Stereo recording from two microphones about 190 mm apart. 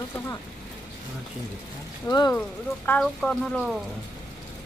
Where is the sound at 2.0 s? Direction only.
20° left (ahead or behind).